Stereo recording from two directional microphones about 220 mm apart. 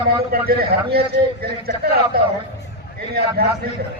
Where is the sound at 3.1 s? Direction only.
45° right (ahead or behind).